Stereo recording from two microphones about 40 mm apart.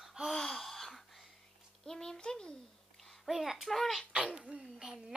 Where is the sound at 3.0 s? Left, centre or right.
Centre.